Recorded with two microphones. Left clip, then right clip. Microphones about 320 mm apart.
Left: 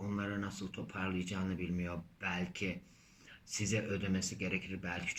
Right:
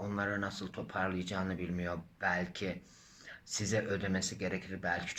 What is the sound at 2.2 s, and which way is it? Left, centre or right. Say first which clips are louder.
Speech: right 5 dB; centre.